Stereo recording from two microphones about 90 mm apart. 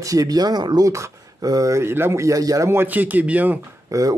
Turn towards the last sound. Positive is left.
turn(degrees=-40)  # may be behind; listen again after turning